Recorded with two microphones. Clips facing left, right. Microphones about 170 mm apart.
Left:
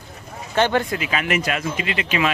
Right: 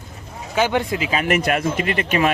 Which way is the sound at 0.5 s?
5° right (ahead or behind).